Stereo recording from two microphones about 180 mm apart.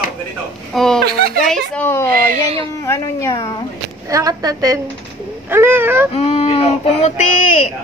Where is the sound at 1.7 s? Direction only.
10° left (ahead or behind).